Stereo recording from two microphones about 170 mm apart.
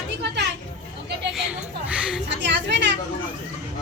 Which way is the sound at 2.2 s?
90° right.